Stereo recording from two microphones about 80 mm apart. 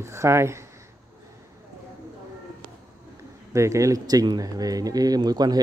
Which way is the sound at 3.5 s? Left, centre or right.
Right.